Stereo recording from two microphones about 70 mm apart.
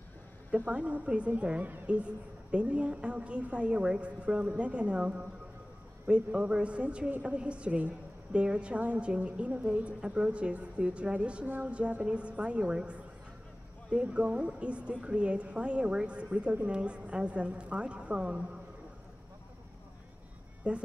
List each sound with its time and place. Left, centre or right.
0.7 s a woman's voice: centre
20.7 s a woman's voice: centre